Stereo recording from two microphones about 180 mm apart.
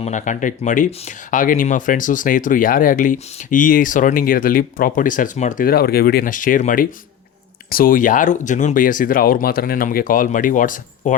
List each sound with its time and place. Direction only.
0.0 s speech: 45° left (ahead or behind)